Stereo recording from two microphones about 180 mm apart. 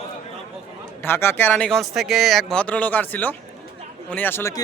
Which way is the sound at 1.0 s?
15° left (ahead or behind).